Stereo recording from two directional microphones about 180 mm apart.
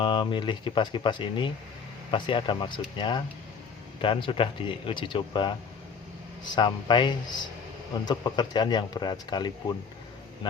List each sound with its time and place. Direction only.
0.0 s speech: 25° left (ahead or behind)